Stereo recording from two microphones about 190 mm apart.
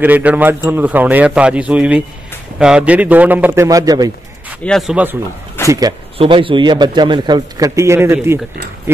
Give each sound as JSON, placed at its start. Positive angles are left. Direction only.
{"t": 0.0, "sound": "a man's voice", "side_deg": -10}
{"t": 4.6, "sound": "speech", "side_deg": 0}
{"t": 5.7, "sound": "speech", "side_deg": -20}